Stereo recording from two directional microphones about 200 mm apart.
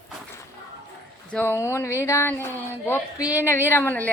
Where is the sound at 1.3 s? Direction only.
10° left (ahead or behind).